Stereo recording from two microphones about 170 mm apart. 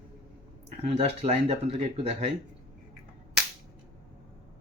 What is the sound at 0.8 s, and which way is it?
Speech, 35° right (ahead or behind).